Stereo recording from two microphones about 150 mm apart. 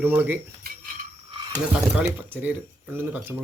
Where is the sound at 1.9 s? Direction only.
10° right (ahead or behind).